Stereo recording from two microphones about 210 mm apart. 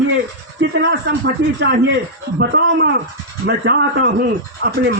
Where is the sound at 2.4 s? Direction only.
55° right (ahead or behind).